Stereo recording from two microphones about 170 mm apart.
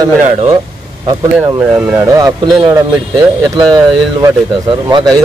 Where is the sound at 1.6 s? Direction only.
15° right (ahead or behind).